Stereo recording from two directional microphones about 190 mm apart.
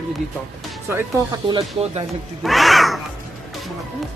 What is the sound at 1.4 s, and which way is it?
Speech, 30° right (ahead or behind).